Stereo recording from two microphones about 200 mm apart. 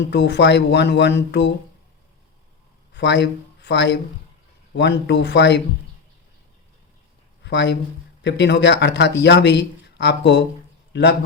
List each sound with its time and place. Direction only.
0.1 s speech: 60° left (ahead or behind)
2.9 s speech: 60° left (ahead or behind)
7.4 s speech: 60° left (ahead or behind)